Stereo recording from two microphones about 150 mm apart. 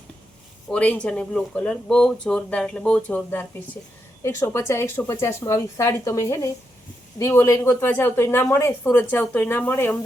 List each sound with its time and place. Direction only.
0.7 s speech: 10° left (ahead or behind)